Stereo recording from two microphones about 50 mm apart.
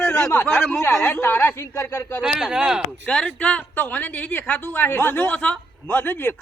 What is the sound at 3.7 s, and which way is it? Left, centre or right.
A woman's voice, left.